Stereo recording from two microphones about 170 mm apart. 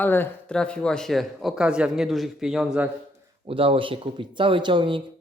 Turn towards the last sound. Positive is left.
turn(degrees=-30)  # may be behind; listen again after turning